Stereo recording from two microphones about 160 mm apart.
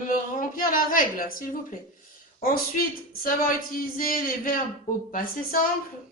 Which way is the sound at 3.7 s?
65° left (ahead or behind).